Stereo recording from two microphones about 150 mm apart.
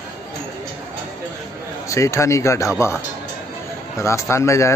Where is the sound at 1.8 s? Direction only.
20° left (ahead or behind).